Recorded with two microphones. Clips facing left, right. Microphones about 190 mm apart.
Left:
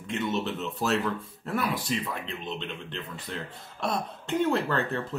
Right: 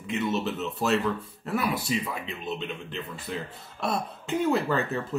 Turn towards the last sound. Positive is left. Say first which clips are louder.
# right 1 dB
turn(degrees=-5)  # may be behind; listen again after turning